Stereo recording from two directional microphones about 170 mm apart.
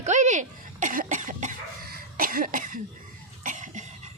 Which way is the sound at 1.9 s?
60° right (ahead or behind).